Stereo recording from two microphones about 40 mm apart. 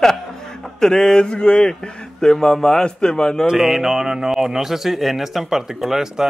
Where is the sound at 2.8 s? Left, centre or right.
Centre.